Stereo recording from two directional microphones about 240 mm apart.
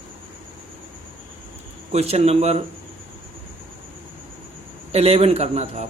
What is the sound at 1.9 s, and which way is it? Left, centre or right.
Speech, right.